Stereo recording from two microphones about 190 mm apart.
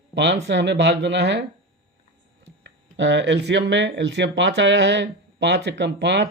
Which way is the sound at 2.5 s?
70° right (ahead or behind).